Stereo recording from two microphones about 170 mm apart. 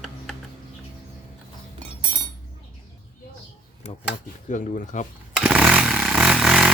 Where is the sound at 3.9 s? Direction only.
35° left (ahead or behind).